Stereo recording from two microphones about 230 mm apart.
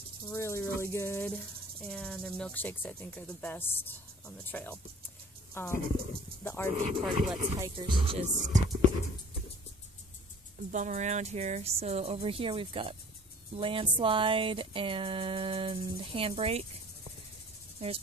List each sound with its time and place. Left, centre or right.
0.3 s snake: centre
5.5 s speech: centre
6.4 s snake: centre
7.0 s speech: centre
7.5 s speech: centre
10.7 s speech: right
17.8 s speech: right